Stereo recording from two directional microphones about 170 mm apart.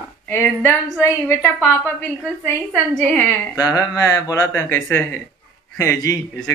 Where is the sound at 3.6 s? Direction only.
20° left (ahead or behind).